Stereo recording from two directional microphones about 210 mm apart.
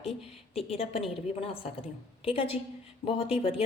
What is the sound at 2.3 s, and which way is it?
A woman's voice, 25° left (ahead or behind).